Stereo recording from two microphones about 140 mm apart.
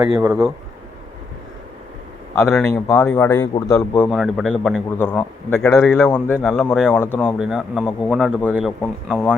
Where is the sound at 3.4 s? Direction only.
30° left (ahead or behind).